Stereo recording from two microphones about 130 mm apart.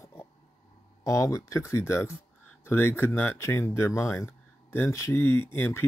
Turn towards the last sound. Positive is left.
turn(degrees=15)  # may be behind; listen again after turning